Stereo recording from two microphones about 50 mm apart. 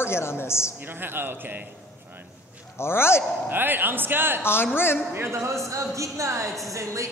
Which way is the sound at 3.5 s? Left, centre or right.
Right.